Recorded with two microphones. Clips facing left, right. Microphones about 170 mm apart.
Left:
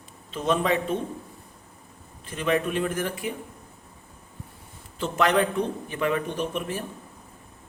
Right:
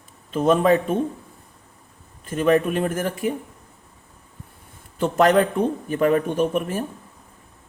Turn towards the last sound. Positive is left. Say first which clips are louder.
# right 7 dB
turn(degrees=-45)  # may be behind; listen again after turning